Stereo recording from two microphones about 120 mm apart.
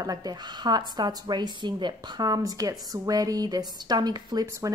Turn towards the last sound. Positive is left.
turn(degrees=-25)  # may be behind; listen again after turning